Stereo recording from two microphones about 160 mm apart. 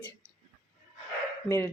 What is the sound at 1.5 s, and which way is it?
Speech, 15° left (ahead or behind).